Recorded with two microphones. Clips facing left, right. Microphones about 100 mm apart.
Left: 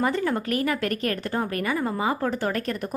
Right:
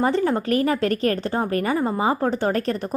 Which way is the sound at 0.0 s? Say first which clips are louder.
Right 4 dB; 30° right (ahead or behind).